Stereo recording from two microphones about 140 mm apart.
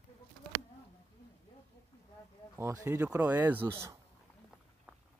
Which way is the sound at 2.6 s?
20° right (ahead or behind).